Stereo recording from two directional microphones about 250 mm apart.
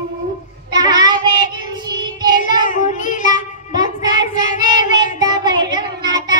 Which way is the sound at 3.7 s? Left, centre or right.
Centre.